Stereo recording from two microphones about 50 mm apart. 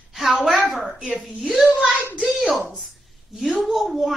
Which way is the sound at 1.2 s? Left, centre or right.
Centre.